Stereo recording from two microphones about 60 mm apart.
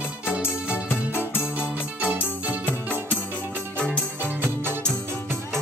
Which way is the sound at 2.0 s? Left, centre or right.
Right.